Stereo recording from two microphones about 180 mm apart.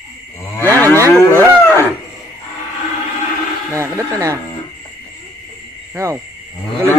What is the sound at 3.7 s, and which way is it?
Speech, 15° right (ahead or behind).